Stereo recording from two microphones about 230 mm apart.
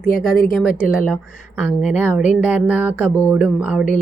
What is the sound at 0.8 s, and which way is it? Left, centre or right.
A woman's voice, centre.